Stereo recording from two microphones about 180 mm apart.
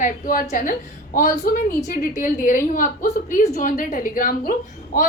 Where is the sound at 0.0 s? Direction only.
50° left (ahead or behind).